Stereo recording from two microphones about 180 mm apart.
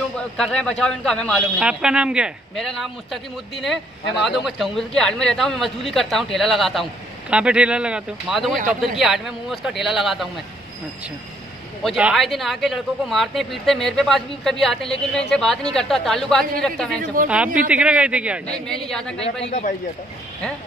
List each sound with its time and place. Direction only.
0.4 s a man's voice: 5° left (ahead or behind)
11.8 s a man's voice: centre (ahead or behind)
17.6 s a man's voice: 5° right (ahead or behind)
19.4 s a man's voice: 40° left (ahead or behind)